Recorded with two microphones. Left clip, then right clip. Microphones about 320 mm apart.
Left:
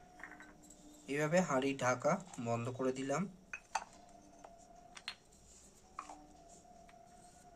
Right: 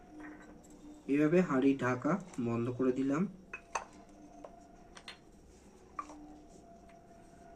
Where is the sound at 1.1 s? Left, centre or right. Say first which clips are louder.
Right 4 dB; left.